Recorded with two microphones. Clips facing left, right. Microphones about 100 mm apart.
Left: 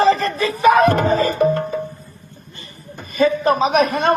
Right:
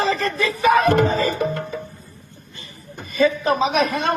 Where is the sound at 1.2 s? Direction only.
45° left (ahead or behind).